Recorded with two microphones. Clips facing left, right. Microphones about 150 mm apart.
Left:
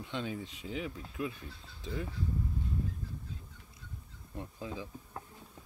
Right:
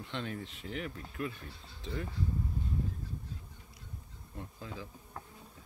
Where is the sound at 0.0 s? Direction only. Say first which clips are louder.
Left 2 dB; 5° left (ahead or behind).